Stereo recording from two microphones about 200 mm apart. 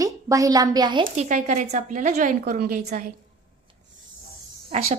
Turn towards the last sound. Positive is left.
turn(degrees=-30)  # may be behind; listen again after turning